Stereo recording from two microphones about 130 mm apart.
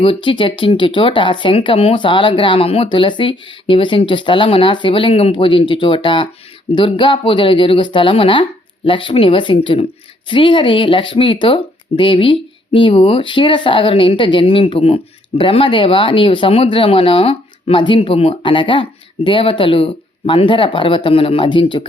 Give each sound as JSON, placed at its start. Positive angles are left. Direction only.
{"t": 0.0, "sound": "speech", "side_deg": 40}